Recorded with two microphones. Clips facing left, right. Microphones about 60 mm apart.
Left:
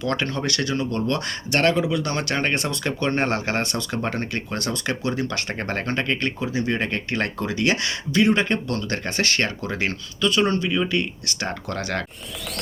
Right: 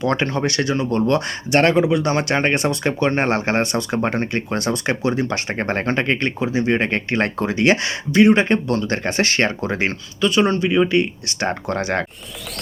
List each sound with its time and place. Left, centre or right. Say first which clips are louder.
0.0 s speech: right 5 dB; right
10.2 s speech: right 4 dB; centre
11.8 s speech: right 5 dB; centre